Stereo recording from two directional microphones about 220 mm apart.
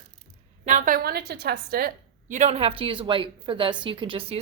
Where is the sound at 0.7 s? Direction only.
35° right (ahead or behind).